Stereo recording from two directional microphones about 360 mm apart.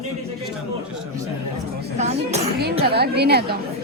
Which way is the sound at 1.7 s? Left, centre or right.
Centre.